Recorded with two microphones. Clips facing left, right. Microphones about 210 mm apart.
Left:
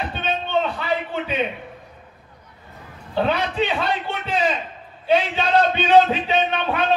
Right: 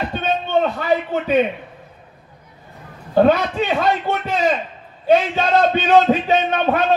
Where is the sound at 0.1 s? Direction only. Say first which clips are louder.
Right 4 dB; 45° right (ahead or behind).